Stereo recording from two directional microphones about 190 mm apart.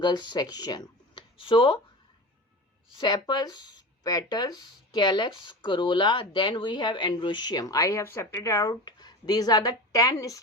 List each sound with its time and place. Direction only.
0.0 s speech: 25° left (ahead or behind)
3.0 s speech: 20° left (ahead or behind)